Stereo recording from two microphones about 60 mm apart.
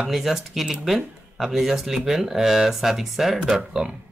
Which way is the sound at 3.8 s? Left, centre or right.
Centre.